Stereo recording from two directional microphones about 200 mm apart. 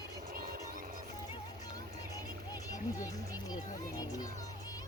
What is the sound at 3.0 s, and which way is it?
Music, 20° left (ahead or behind).